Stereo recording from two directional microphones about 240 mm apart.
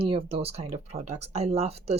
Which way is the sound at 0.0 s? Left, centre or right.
Right.